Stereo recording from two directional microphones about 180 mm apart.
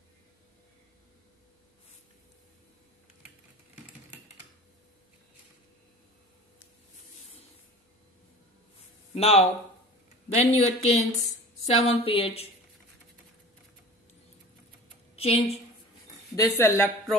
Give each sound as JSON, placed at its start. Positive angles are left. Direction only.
{"t": 9.1, "sound": "speech", "side_deg": 35}
{"t": 15.1, "sound": "speech", "side_deg": 35}
{"t": 16.3, "sound": "a woman's voice", "side_deg": 10}